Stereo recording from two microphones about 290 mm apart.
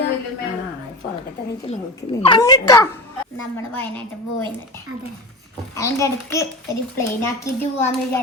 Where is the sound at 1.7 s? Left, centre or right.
Left; by 4.0 s centre.